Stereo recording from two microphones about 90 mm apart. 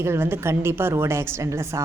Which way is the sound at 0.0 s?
30° right (ahead or behind).